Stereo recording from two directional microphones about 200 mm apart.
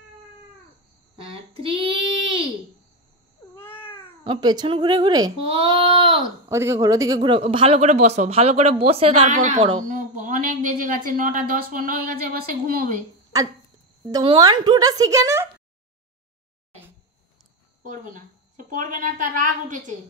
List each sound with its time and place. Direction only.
1.1 s child singing: 25° right (ahead or behind)
3.5 s cat: 10° left (ahead or behind)
4.2 s speech: 25° right (ahead or behind)
6.5 s speech: 15° right (ahead or behind); by 12.8 s 45° right (ahead or behind)
13.3 s speech: 15° right (ahead or behind)
17.8 s a woman's voice: 40° right (ahead or behind)